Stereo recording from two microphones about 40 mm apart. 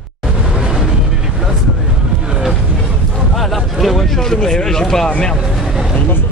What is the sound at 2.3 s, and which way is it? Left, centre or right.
Music, centre.